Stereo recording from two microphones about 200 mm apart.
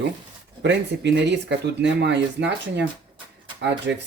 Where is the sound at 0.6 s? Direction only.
60° right (ahead or behind).